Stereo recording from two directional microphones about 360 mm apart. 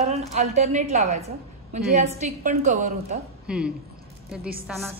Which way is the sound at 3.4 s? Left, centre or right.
Centre.